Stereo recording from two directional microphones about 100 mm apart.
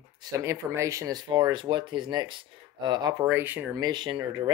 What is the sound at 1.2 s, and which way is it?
Speech, 50° right (ahead or behind).